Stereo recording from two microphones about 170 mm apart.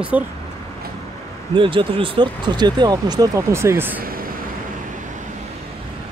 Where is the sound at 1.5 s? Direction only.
30° right (ahead or behind); by 4.0 s 15° right (ahead or behind).